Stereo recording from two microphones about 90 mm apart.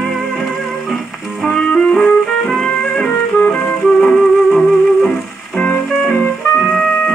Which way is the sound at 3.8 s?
5° left (ahead or behind).